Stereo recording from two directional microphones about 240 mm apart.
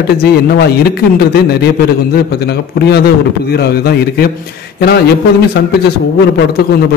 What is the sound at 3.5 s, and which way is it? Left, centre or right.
A man's voice, left.